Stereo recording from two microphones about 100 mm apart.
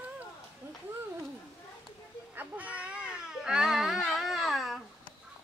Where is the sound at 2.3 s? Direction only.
15° right (ahead or behind); by 4.8 s centre (ahead or behind).